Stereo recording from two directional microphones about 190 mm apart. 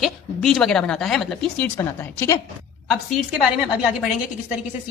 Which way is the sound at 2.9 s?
5° right (ahead or behind).